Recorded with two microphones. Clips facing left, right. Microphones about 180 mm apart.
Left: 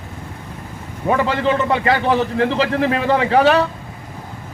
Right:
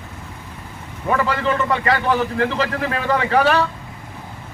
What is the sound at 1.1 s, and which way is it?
A man's voice, 25° left (ahead or behind).